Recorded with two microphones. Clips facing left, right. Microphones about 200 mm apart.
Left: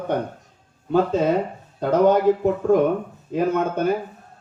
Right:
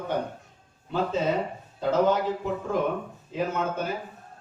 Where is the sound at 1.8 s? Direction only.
55° left (ahead or behind).